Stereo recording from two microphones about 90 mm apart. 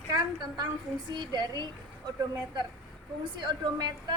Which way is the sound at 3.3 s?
55° right (ahead or behind).